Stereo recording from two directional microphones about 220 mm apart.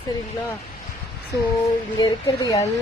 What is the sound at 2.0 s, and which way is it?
Speech, 15° left (ahead or behind).